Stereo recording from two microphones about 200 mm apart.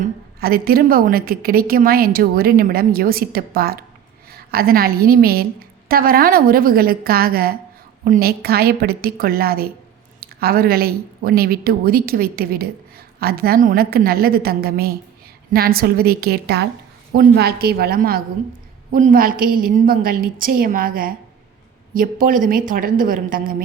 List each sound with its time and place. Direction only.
0.0 s a woman's voice: 50° right (ahead or behind)